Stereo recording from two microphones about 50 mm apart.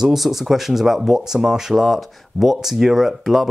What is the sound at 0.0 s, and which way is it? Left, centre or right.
Speech, centre.